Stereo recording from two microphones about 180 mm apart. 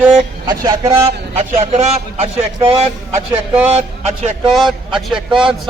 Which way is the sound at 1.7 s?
35° right (ahead or behind).